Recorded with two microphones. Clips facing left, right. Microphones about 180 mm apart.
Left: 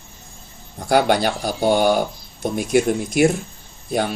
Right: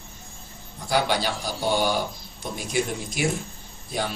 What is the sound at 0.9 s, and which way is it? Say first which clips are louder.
Speech: left 7 dB; 55° left (ahead or behind).